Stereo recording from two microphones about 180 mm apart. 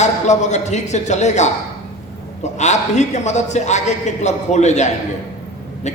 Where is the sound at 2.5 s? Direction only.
40° left (ahead or behind).